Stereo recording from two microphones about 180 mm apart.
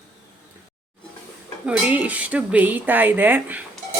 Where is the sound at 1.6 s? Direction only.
10° right (ahead or behind).